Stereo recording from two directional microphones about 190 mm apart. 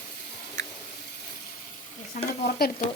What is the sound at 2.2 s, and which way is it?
Stir, 50° left (ahead or behind).